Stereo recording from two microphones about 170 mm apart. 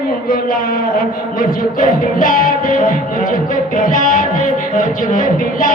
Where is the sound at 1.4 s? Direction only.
55° left (ahead or behind).